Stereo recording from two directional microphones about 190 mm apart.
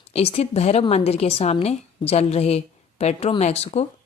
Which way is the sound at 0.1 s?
30° left (ahead or behind).